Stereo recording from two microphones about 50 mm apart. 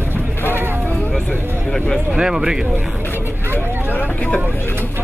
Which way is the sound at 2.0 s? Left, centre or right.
Centre.